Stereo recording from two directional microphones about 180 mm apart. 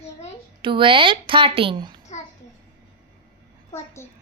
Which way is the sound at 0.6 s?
25° right (ahead or behind).